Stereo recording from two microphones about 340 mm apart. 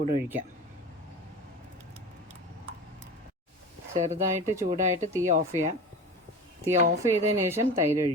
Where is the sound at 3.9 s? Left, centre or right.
Right.